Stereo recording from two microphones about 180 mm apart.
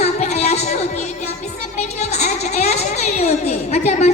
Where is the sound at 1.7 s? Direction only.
35° left (ahead or behind).